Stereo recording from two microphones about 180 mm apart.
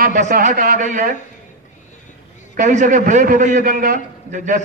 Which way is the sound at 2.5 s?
45° right (ahead or behind).